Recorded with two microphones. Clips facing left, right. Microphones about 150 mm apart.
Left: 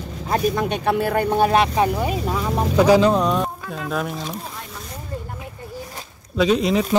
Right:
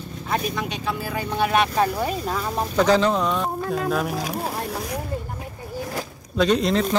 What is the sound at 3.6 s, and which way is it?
Speech, 40° right (ahead or behind).